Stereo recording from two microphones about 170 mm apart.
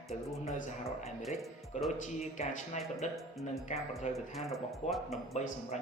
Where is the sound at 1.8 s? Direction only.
45° left (ahead or behind).